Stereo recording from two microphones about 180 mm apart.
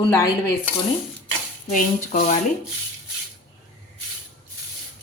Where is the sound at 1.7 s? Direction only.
45° left (ahead or behind).